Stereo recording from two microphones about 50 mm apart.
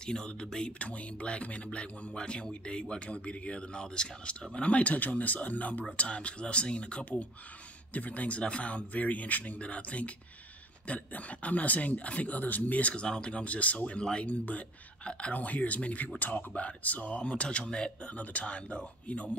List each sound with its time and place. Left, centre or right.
0.0 s speech: centre; by 5.9 s left
5.9 s speech: centre